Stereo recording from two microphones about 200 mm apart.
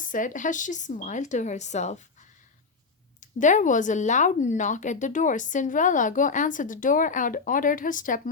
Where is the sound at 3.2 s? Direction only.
40° left (ahead or behind).